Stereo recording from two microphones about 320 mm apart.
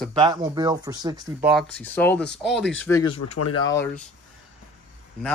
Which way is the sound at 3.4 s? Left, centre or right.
Left.